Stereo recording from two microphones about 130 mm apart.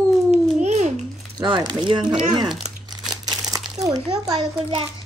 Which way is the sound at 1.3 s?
35° right (ahead or behind).